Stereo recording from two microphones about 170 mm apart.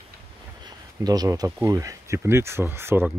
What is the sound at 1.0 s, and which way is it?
Speech, 20° right (ahead or behind).